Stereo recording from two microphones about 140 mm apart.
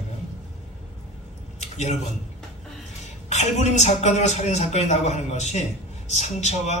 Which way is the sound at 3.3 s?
55° left (ahead or behind).